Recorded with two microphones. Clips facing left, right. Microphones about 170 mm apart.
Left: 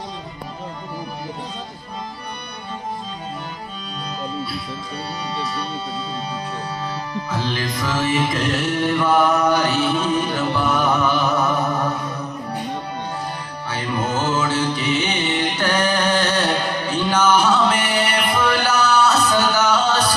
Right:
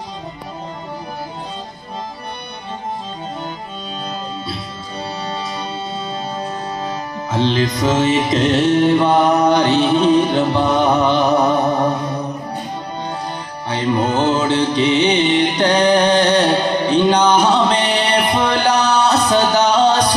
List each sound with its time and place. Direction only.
6.8 s music: 25° right (ahead or behind)
13.7 s music: 20° right (ahead or behind)